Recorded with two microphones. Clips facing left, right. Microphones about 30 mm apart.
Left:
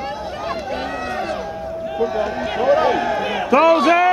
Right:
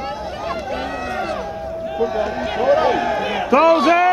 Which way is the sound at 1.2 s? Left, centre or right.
Centre.